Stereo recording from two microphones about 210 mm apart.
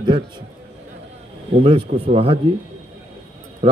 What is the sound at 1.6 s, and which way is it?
Speech, 25° right (ahead or behind).